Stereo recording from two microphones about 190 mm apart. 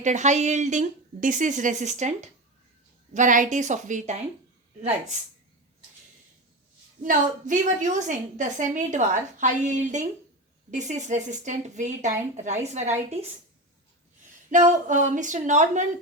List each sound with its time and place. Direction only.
0.0 s a woman's voice: 40° right (ahead or behind)
7.0 s a woman's voice: 45° right (ahead or behind)
14.7 s a woman's voice: 40° right (ahead or behind)